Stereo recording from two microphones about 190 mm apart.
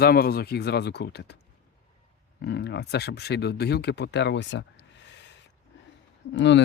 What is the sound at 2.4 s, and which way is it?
Speech, 60° left (ahead or behind).